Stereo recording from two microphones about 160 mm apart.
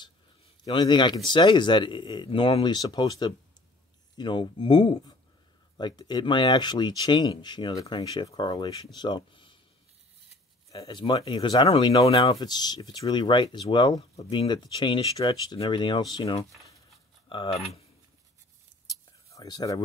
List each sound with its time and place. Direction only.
0.7 s speech: 30° left (ahead or behind)
10.7 s speech: 25° left (ahead or behind)
12.2 s speech: 25° left (ahead or behind)
19.3 s speech: 25° left (ahead or behind)